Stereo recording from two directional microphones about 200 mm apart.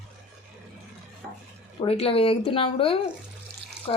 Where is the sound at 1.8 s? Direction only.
30° left (ahead or behind).